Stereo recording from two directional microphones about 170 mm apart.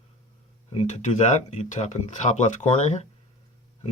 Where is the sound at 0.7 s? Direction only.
35° left (ahead or behind).